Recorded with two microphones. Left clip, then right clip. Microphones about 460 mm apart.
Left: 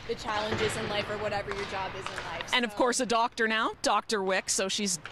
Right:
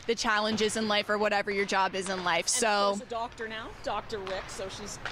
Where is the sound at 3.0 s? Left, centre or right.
Left.